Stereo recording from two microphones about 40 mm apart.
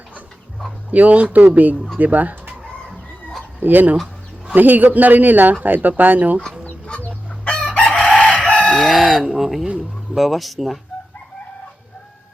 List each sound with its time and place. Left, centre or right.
0.9 s speech: right
3.6 s a man's voice: right
6.9 s chicken: left
8.9 s speech: centre